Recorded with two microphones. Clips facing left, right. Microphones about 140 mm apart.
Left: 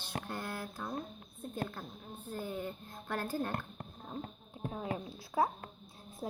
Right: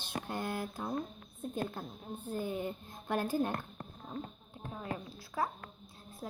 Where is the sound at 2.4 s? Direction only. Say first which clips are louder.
Right 1 dB; 15° right (ahead or behind).